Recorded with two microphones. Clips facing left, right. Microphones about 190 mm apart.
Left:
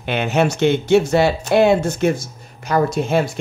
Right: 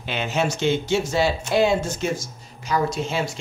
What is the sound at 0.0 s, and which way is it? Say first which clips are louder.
Speech: left 6 dB; 60° left (ahead or behind).